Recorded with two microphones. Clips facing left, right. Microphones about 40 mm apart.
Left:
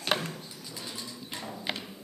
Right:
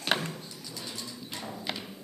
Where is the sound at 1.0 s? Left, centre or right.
Centre.